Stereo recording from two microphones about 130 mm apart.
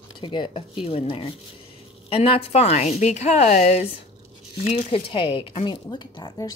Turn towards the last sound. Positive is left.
turn(degrees=30)  # may be behind; listen again after turning